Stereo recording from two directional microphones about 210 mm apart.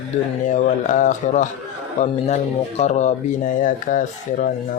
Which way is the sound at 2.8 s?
35° left (ahead or behind).